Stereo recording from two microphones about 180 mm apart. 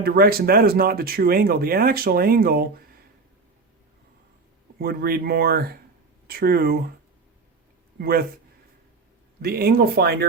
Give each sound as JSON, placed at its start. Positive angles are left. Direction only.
{"t": 0.0, "sound": "speech", "side_deg": -55}
{"t": 4.8, "sound": "speech", "side_deg": -55}
{"t": 7.9, "sound": "a man's voice", "side_deg": -60}
{"t": 9.4, "sound": "speech", "side_deg": -60}